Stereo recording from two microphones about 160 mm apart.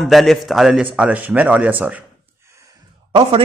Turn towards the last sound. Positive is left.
turn(degrees=-35)  # may be behind; listen again after turning